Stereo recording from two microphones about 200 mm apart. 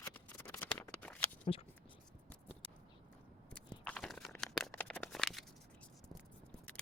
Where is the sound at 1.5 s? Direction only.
30° left (ahead or behind).